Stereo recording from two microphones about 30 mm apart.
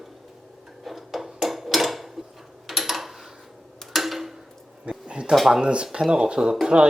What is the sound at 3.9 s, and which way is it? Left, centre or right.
Tick-tock, centre.